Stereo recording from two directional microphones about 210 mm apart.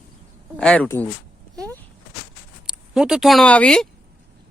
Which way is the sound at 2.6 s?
5° right (ahead or behind).